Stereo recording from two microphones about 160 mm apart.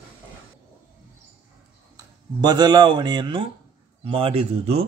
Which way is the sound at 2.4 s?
25° right (ahead or behind).